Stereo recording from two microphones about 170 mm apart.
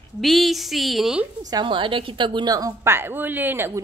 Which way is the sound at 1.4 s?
25° right (ahead or behind).